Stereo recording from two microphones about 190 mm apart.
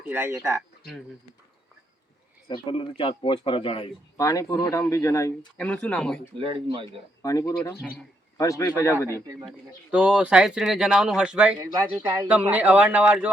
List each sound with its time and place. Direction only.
0.1 s a man's voice: 10° right (ahead or behind)
2.5 s speech: 25° left (ahead or behind); by 6.1 s 5° left (ahead or behind)
6.3 s speech: 25° right (ahead or behind)
7.2 s speech: 20° left (ahead or behind)
9.0 s a man's voice: 15° right (ahead or behind)
9.5 s speech: 5° right (ahead or behind)
12.0 s speech: 20° right (ahead or behind)
12.3 s a man's voice: 5° right (ahead or behind)